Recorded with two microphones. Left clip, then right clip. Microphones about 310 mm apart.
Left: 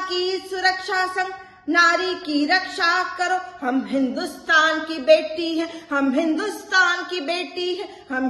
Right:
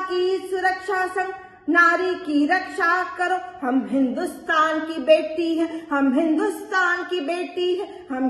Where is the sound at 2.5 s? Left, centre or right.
Left.